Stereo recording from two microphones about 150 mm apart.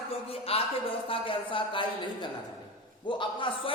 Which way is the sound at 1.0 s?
35° left (ahead or behind).